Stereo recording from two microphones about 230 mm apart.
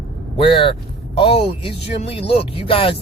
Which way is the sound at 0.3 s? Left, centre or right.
Left.